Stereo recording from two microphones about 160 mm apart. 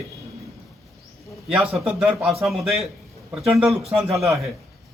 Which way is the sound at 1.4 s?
5° right (ahead or behind).